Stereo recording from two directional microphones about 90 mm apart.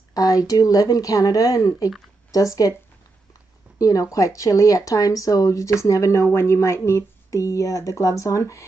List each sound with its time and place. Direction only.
0.1 s speech: 45° left (ahead or behind)
3.7 s speech: 40° left (ahead or behind)